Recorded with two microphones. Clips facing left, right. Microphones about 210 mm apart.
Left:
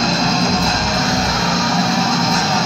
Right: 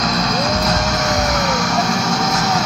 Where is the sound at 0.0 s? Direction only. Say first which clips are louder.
Left 2 dB; 25° left (ahead or behind).